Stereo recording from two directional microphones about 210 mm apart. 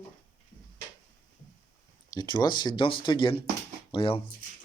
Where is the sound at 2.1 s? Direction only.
20° left (ahead or behind).